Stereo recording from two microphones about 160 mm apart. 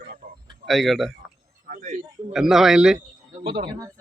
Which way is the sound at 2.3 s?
Centre (ahead or behind).